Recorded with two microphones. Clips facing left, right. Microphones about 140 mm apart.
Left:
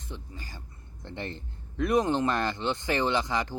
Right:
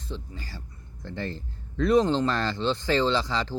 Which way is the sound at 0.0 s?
20° left (ahead or behind).